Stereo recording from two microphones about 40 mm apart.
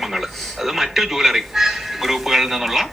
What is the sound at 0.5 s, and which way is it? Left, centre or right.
A man's voice, centre.